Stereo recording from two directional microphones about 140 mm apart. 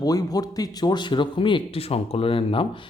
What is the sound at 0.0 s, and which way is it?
A man's voice, 25° left (ahead or behind).